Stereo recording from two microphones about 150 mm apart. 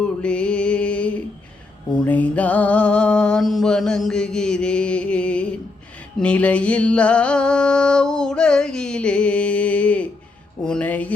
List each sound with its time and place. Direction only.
0.0 s music: 5° left (ahead or behind)
1.9 s mantra: 10° left (ahead or behind)
6.1 s a sound: 10° left (ahead or behind)
10.6 s mantra: 5° left (ahead or behind)